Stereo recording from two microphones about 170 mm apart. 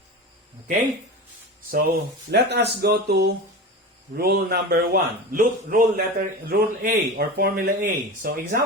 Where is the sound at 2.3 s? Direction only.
75° right (ahead or behind).